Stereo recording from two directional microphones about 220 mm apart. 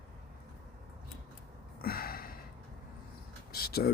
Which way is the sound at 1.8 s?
45° left (ahead or behind).